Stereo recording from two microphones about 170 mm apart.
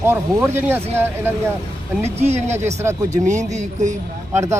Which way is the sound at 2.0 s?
40° right (ahead or behind).